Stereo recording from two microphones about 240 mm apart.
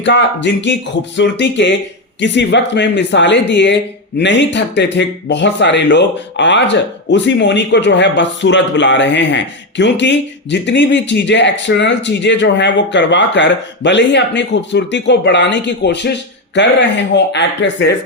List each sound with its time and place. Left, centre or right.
0.0 s speech: left